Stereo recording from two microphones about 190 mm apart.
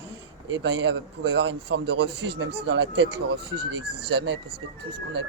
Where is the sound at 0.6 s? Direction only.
65° right (ahead or behind).